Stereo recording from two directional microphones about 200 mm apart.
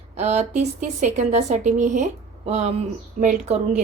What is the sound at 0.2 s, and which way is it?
Speech, 35° right (ahead or behind).